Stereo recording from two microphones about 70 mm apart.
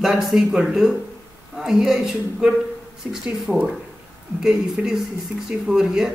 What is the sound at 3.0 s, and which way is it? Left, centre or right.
Speech, right.